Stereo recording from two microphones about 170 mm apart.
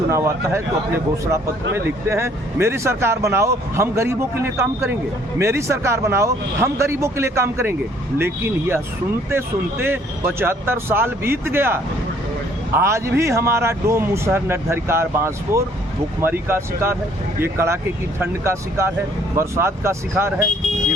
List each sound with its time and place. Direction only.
0.1 s speech: 15° right (ahead or behind)
1.7 s speech: 15° right (ahead or behind)